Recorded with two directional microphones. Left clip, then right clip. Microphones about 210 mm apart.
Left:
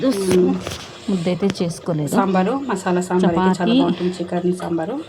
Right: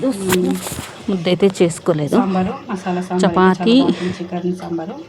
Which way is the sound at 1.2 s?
15° right (ahead or behind).